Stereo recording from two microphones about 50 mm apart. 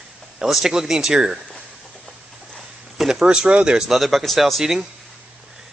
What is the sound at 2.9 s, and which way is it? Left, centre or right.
Speech, centre.